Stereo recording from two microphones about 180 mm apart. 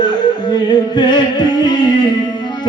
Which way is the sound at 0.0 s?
25° left (ahead or behind).